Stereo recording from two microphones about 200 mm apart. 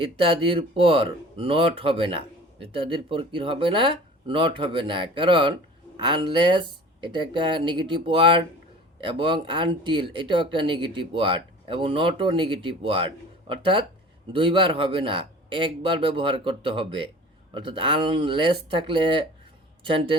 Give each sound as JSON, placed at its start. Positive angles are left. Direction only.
{"t": 0.0, "sound": "speech", "side_deg": -25}